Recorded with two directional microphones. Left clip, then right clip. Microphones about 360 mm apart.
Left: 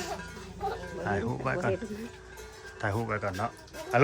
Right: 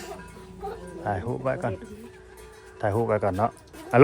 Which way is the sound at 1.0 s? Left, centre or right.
Centre.